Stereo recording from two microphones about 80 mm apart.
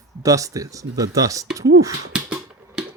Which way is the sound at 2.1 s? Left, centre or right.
Centre.